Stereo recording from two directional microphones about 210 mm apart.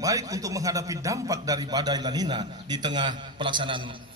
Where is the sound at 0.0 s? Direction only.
15° right (ahead or behind).